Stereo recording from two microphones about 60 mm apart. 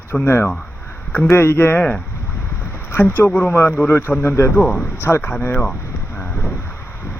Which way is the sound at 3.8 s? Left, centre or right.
Left.